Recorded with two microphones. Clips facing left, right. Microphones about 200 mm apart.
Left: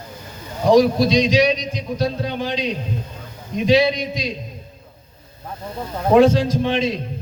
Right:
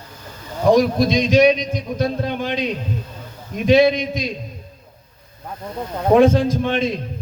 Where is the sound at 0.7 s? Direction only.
50° right (ahead or behind).